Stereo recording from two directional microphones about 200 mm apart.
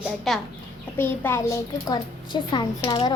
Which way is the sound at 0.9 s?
10° left (ahead or behind).